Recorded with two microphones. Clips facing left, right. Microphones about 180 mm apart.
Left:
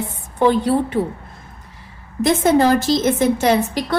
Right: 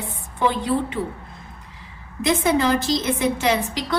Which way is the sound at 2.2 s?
50° left (ahead or behind).